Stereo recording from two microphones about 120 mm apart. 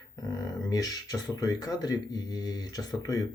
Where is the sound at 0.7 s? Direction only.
30° left (ahead or behind).